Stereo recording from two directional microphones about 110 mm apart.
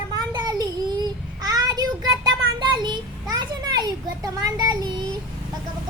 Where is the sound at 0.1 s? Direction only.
40° right (ahead or behind).